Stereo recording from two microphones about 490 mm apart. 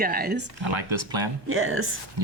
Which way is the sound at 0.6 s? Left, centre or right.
Right.